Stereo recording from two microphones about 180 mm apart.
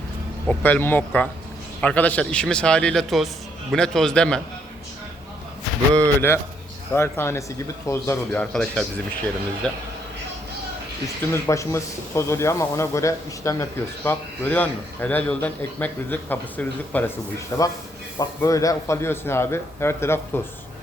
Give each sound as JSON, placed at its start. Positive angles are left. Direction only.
{"t": 0.4, "sound": "a man's voice", "side_deg": 10}
{"t": 5.9, "sound": "speech", "side_deg": -15}
{"t": 6.9, "sound": "a man's voice", "side_deg": 15}
{"t": 11.0, "sound": "speech", "side_deg": 15}